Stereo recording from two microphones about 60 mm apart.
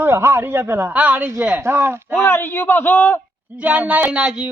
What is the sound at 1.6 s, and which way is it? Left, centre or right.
Speech, right.